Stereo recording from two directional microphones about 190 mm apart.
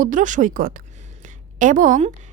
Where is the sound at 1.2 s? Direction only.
40° right (ahead or behind).